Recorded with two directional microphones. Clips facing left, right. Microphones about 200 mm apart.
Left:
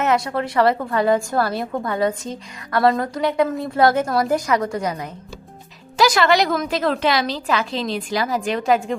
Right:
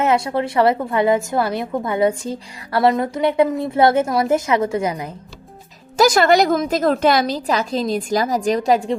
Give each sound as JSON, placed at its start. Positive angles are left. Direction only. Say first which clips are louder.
{"t": 0.0, "sound": "a woman's voice", "louder": "right 2 dB", "side_deg": -25}
{"t": 6.0, "sound": "a woman's voice", "louder": "right 3 dB", "side_deg": -45}